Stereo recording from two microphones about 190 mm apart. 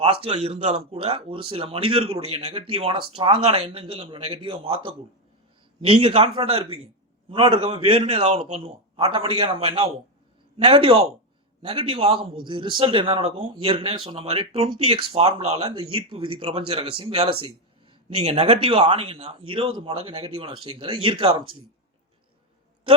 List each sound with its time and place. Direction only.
0.0 s a man's voice: 30° right (ahead or behind)